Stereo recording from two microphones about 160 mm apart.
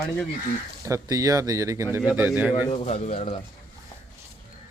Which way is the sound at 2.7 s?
40° left (ahead or behind).